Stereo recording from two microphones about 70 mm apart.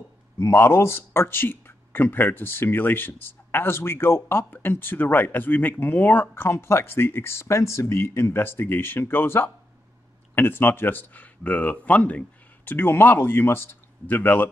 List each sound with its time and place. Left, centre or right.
0.5 s speech: left